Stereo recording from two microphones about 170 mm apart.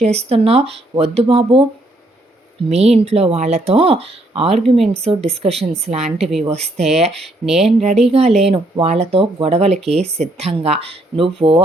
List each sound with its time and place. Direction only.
0.0 s speech: 40° right (ahead or behind)
2.6 s speech: 40° right (ahead or behind)
6.1 s speech: centre (ahead or behind)
6.5 s speech: 40° right (ahead or behind)
7.4 s speech: centre (ahead or behind)
7.8 s speech: 40° right (ahead or behind)